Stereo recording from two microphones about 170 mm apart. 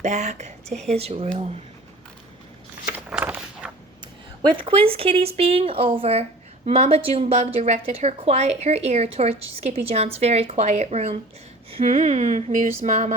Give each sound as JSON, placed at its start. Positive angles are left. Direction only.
{"t": 0.0, "sound": "a woman's voice", "side_deg": -45}
{"t": 3.1, "sound": "a sound", "side_deg": -10}
{"t": 4.4, "sound": "a woman's voice", "side_deg": -30}